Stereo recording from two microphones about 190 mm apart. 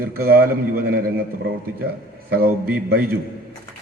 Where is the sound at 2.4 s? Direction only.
55° right (ahead or behind).